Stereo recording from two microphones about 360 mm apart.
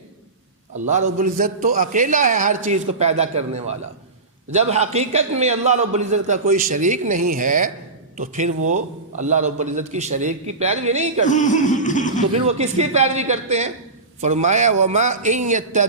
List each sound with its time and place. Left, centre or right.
0.9 s a man's voice: centre
11.3 s laughter: left
12.3 s a man's voice: centre